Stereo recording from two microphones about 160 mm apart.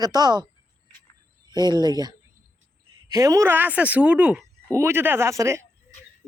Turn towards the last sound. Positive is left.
turn(degrees=-20)  # may be behind; listen again after turning